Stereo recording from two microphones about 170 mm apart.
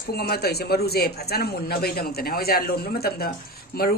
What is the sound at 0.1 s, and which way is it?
A man's voice, 65° left (ahead or behind).